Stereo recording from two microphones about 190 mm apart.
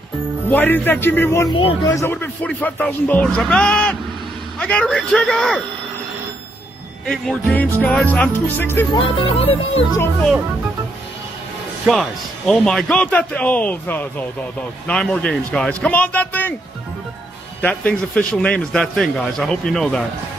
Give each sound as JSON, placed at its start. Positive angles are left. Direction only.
{"t": 0.5, "sound": "a man's voice", "side_deg": 10}
{"t": 7.1, "sound": "a man's voice", "side_deg": 0}
{"t": 8.9, "sound": "music", "side_deg": 30}
{"t": 11.8, "sound": "a man's voice", "side_deg": 0}
{"t": 17.6, "sound": "a man's voice", "side_deg": 5}